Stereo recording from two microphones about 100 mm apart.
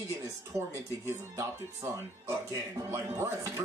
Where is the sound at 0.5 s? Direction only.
25° right (ahead or behind).